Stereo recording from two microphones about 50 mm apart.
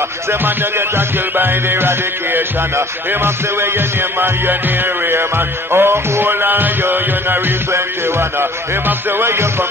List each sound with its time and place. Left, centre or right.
0.3 s music: right
5.7 s music: right